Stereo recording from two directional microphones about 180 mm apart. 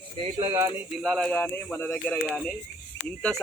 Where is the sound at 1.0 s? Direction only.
Centre (ahead or behind).